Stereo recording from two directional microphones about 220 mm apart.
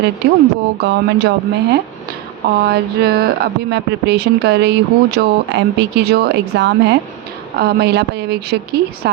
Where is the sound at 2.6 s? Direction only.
45° right (ahead or behind).